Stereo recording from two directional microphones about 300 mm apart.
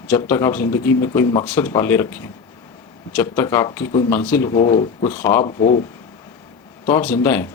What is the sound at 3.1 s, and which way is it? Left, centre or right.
Speech, centre.